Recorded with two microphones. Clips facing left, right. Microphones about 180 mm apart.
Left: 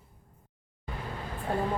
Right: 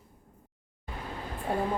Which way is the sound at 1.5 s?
10° right (ahead or behind).